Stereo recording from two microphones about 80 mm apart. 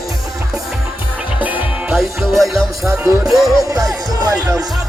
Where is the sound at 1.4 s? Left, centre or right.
Centre.